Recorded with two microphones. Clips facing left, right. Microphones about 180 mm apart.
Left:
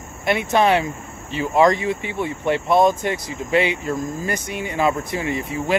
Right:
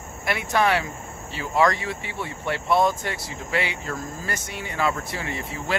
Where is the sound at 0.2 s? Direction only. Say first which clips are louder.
Left 5 dB; 20° left (ahead or behind).